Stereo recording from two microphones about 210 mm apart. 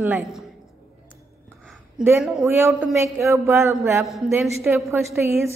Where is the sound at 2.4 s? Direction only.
10° right (ahead or behind).